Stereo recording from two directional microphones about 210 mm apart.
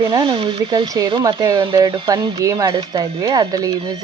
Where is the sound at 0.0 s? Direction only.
25° right (ahead or behind).